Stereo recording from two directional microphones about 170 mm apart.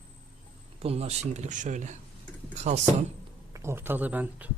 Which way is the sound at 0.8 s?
35° right (ahead or behind).